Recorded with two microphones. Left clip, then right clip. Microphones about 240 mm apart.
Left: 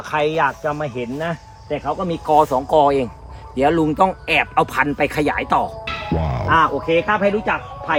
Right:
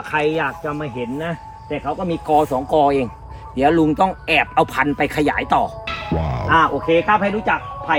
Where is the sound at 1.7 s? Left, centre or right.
Centre.